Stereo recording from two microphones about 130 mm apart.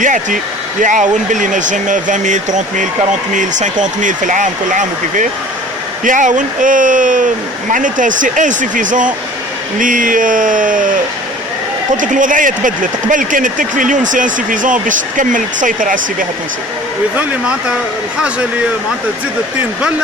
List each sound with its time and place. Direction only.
0.0 s speech: 80° right
11.9 s speech: 85° right